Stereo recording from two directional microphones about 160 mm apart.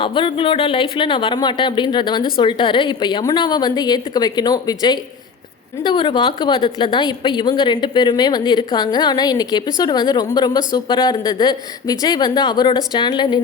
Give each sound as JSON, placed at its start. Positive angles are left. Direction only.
{"t": 0.0, "sound": "a woman's voice", "side_deg": 30}